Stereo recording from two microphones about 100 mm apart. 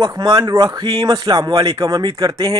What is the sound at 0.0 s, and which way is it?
Speech, 40° right (ahead or behind).